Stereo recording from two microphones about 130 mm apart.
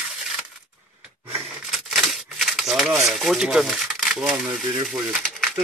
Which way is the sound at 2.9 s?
Centre (ahead or behind).